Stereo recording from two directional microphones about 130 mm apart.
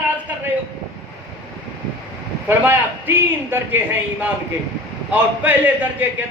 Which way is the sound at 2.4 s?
15° right (ahead or behind).